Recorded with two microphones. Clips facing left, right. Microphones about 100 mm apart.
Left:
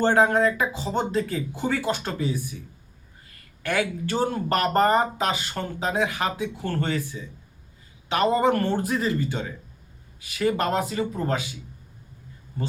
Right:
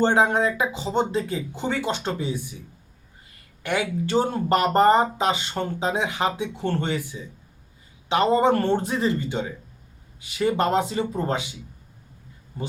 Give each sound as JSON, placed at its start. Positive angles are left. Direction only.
{"t": 0.0, "sound": "speech", "side_deg": -20}
{"t": 3.6, "sound": "speech", "side_deg": -20}